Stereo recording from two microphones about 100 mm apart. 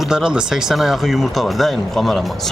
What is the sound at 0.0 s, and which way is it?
Speech, 5° right (ahead or behind).